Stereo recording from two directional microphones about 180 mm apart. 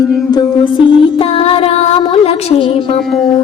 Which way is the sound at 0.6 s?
30° left (ahead or behind).